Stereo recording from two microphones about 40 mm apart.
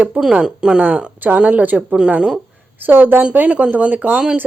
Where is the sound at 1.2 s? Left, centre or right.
Right.